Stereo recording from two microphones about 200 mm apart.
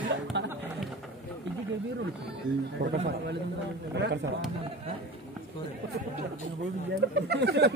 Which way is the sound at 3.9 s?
60° right (ahead or behind).